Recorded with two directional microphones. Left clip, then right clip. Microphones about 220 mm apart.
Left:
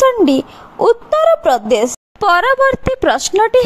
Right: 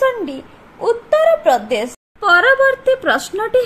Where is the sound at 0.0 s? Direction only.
40° left (ahead or behind).